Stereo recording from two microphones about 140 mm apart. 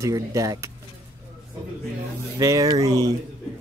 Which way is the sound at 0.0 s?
25° right (ahead or behind).